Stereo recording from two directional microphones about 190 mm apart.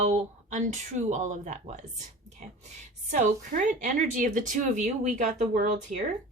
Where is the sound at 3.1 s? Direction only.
40° right (ahead or behind).